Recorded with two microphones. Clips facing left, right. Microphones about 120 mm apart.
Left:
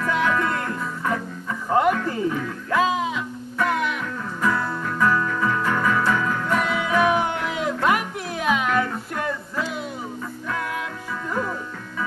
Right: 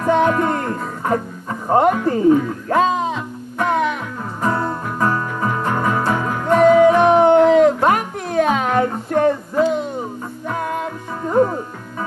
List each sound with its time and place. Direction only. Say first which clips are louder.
0.0 s music: right 7 dB; 45° right (ahead or behind)
11.2 s music: right 12 dB; 45° right (ahead or behind)